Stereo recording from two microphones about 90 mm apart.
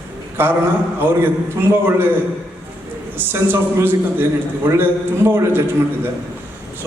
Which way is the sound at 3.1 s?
25° right (ahead or behind).